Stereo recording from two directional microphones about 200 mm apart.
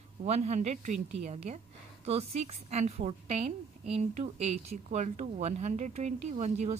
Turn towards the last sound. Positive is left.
turn(degrees=-35)  # may be behind; listen again after turning